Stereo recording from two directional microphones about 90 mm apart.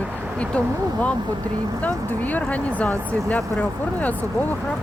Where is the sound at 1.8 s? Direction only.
15° left (ahead or behind).